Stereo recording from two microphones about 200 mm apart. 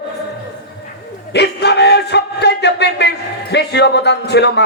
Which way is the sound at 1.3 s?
55° left (ahead or behind).